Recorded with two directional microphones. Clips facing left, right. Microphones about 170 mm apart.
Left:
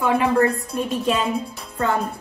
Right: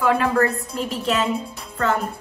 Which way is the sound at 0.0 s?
20° left (ahead or behind).